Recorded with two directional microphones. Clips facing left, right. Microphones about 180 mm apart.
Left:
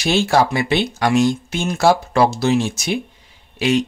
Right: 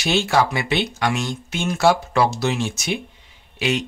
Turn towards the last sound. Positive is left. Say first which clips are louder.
# left 5 dB
turn(degrees=40)  # may be behind; listen again after turning